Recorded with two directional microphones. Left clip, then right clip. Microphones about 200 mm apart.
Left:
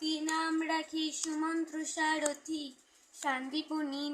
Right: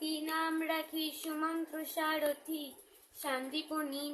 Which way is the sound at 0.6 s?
20° right (ahead or behind).